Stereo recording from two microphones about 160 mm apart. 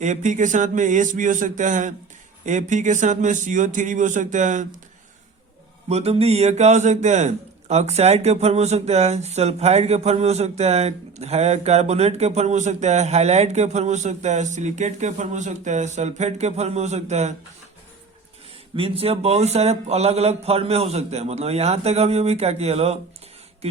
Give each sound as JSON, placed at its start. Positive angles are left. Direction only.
{"t": 0.0, "sound": "a man's voice", "side_deg": -50}
{"t": 5.9, "sound": "a man's voice", "side_deg": -40}
{"t": 18.8, "sound": "a man's voice", "side_deg": -40}